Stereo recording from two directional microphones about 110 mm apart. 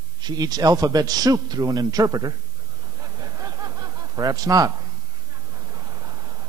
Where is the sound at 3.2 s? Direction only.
35° right (ahead or behind).